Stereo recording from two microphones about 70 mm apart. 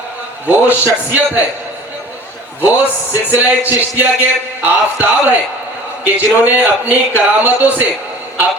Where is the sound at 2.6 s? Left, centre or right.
Right.